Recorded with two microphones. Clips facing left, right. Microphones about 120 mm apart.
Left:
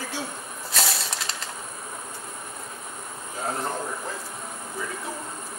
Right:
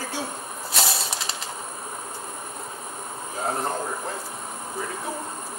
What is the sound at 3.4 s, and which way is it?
Speech, 30° right (ahead or behind).